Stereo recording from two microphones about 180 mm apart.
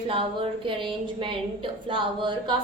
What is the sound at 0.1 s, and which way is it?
A woman's voice, 30° right (ahead or behind).